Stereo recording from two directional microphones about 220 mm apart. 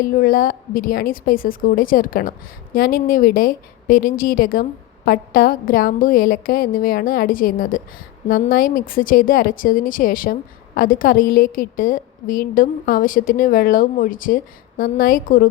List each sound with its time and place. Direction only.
0.0 s a woman's voice: 40° left (ahead or behind)